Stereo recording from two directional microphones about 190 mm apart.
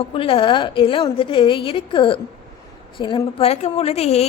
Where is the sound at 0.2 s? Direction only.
30° left (ahead or behind).